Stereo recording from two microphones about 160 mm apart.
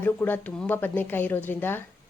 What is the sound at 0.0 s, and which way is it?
A woman's voice, 10° left (ahead or behind).